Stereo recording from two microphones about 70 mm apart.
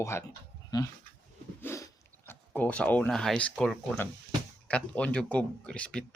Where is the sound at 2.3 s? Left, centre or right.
Left.